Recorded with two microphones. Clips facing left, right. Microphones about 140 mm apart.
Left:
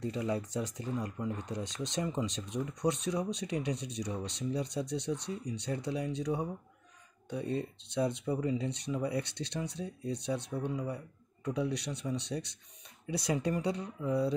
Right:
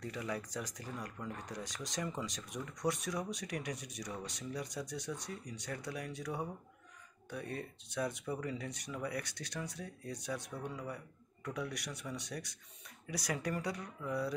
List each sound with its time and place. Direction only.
0.0 s speech: 25° left (ahead or behind)